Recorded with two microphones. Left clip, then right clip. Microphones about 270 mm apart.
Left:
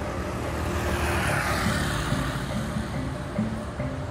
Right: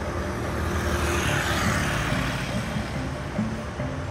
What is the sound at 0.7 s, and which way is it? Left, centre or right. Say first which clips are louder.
Music: right 1 dB; left.